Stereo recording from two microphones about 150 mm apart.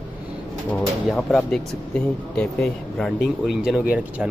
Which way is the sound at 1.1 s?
Centre (ahead or behind).